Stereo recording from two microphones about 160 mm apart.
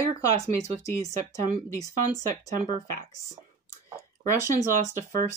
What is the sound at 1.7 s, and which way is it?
Speech, 20° left (ahead or behind).